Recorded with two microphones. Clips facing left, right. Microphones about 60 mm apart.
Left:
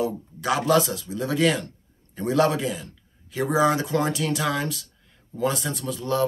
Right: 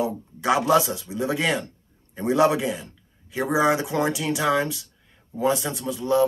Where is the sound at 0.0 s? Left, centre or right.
Centre.